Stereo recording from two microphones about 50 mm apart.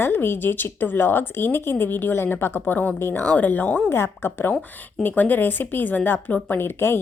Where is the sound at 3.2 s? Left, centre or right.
Left.